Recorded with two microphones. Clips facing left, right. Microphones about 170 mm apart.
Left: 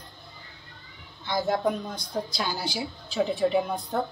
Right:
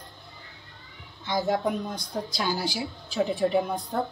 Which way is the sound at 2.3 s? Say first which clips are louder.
Right 2 dB; centre (ahead or behind).